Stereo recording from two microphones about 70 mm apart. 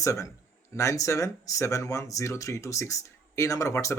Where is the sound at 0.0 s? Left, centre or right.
Left.